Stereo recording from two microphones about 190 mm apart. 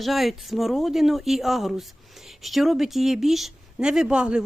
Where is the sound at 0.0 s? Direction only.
Centre (ahead or behind).